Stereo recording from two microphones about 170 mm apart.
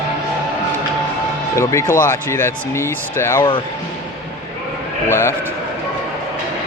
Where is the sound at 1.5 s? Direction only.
15° left (ahead or behind).